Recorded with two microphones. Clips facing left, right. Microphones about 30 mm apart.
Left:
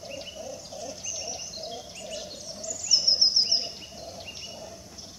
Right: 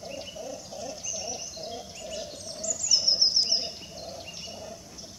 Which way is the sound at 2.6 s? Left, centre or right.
Centre.